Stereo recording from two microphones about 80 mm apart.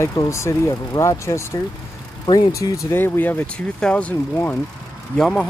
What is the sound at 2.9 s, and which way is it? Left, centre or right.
Speech, left.